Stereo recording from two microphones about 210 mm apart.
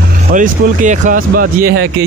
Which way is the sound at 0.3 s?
40° right (ahead or behind).